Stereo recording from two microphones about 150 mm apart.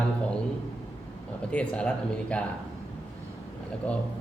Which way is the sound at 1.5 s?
5° left (ahead or behind).